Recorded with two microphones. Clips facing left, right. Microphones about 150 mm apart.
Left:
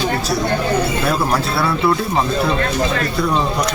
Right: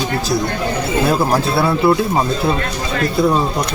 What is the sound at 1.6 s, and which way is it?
Speech, 20° right (ahead or behind).